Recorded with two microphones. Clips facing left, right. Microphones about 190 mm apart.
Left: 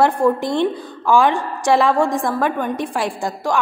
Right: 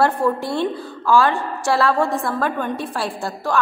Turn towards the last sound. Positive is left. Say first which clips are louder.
# left 3 dB
turn(degrees=15)  # may be behind; listen again after turning